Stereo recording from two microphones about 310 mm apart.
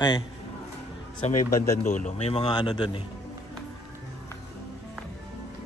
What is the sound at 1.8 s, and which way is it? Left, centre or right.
A man's voice, left.